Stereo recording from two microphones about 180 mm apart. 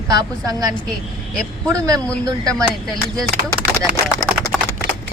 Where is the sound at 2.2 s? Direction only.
20° right (ahead or behind).